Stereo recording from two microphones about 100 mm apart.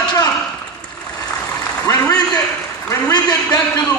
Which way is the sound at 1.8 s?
35° left (ahead or behind).